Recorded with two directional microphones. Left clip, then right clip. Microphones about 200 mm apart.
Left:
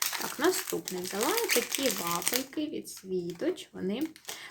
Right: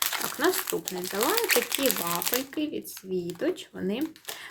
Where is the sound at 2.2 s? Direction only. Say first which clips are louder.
Right 3 dB; 5° right (ahead or behind).